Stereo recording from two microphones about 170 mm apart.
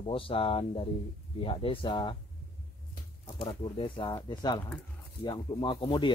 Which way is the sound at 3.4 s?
30° left (ahead or behind).